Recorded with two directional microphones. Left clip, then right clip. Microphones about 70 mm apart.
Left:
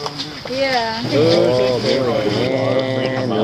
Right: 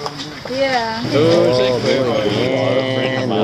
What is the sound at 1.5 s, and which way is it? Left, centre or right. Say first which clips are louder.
Speech: right 1 dB; right.